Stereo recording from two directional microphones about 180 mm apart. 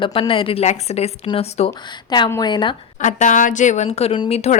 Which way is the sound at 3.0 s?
45° left (ahead or behind).